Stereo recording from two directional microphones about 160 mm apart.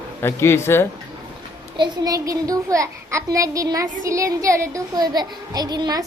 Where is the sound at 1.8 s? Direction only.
20° right (ahead or behind).